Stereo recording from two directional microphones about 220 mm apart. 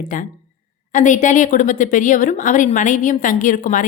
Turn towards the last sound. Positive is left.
turn(degrees=35)  # may be behind; listen again after turning